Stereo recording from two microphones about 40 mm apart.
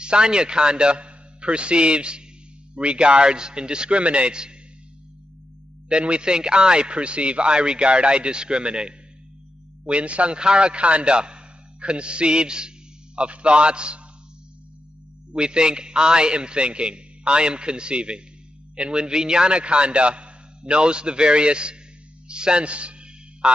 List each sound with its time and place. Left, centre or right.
0.0 s a man's voice: right
5.9 s a man's voice: right
15.3 s a man's voice: right
23.4 s a sound: right